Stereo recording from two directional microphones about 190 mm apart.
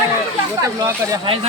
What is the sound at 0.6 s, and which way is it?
Speech, 15° right (ahead or behind).